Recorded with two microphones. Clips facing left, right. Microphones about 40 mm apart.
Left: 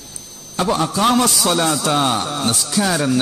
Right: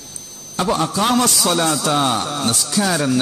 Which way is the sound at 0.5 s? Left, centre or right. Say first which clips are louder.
Even; centre.